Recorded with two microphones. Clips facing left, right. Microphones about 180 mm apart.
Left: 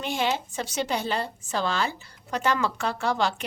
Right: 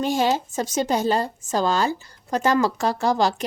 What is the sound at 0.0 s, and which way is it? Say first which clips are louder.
A woman's voice: right 6 dB; 40° right (ahead or behind).